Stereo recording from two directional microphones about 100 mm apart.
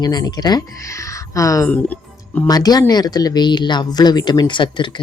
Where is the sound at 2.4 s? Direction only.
40° left (ahead or behind).